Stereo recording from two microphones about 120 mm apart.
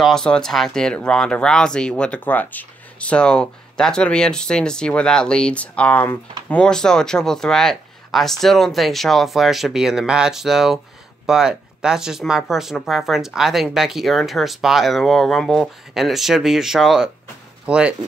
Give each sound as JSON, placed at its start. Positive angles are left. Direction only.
{"t": 0.0, "sound": "speech", "side_deg": 5}